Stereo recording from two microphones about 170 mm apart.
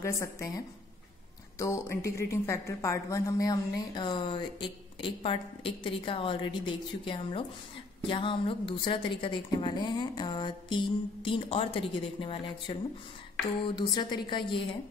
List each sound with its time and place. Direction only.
0.0 s a woman's voice: 20° left (ahead or behind)
1.6 s a woman's voice: 15° left (ahead or behind)